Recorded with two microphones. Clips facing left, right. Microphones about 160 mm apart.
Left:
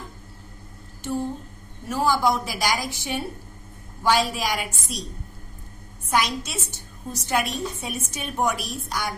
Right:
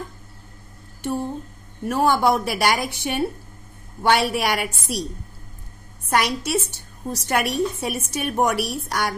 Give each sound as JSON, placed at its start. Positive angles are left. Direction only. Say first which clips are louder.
{"t": 1.0, "sound": "a sound", "louder": "right 2 dB", "side_deg": -60}
{"t": 1.9, "sound": "a woman's voice", "louder": "right 3 dB", "side_deg": -60}
{"t": 6.0, "sound": "a woman's voice", "louder": "right 3 dB", "side_deg": -60}